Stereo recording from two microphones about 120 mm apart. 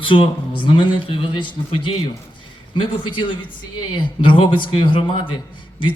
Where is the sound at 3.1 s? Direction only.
40° left (ahead or behind).